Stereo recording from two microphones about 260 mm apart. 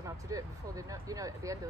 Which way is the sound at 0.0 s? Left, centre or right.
Centre.